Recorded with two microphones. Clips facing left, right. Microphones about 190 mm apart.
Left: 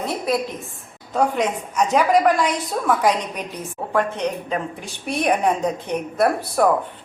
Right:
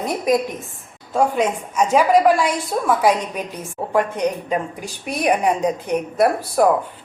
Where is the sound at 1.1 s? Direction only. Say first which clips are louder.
Right 2 dB; 10° right (ahead or behind).